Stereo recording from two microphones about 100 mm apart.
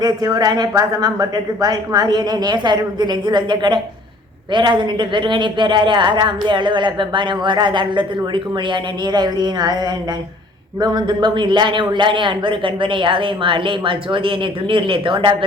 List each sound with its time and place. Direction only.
0.0 s a man's voice: 40° right (ahead or behind)